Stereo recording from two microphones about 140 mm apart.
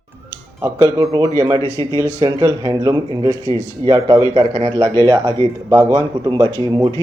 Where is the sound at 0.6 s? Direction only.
20° right (ahead or behind).